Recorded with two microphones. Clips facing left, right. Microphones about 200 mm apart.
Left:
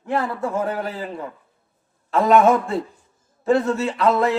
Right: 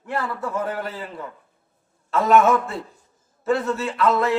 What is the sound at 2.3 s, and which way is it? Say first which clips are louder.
Speech: left 1 dB; 30° left (ahead or behind).